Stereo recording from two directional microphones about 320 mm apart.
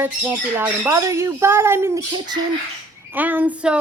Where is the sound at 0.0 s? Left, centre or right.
Centre.